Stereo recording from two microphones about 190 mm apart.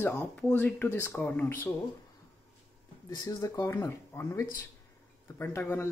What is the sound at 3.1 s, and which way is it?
Speech, 20° left (ahead or behind).